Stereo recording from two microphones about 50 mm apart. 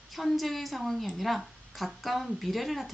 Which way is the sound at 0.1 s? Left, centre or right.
Centre.